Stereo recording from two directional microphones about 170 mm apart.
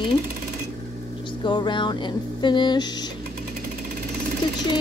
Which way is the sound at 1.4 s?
25° left (ahead or behind).